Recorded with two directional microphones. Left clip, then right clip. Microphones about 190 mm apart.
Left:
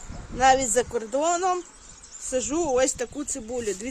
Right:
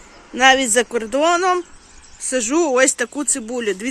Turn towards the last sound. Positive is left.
turn(degrees=-10)  # may be behind; listen again after turning